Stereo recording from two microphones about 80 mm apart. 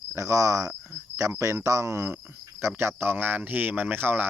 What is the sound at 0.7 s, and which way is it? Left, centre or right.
Cricket, right.